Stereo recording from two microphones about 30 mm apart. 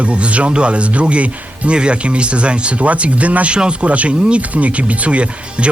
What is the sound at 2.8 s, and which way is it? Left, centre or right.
Speech, right.